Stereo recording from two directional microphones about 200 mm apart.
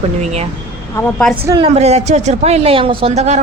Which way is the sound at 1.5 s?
25° right (ahead or behind).